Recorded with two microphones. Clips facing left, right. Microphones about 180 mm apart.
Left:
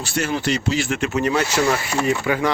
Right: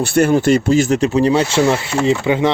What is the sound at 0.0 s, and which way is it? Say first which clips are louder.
Speech: right 10 dB; 55° right (ahead or behind).